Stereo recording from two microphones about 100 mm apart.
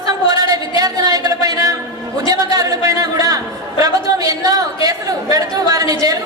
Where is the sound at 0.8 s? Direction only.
35° right (ahead or behind).